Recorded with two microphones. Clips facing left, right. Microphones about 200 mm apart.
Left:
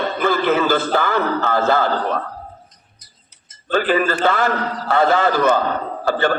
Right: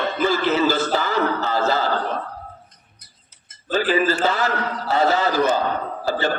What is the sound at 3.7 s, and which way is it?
A man's voice, 55° left (ahead or behind).